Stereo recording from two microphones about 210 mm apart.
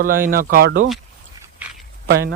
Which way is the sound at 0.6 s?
75° right (ahead or behind).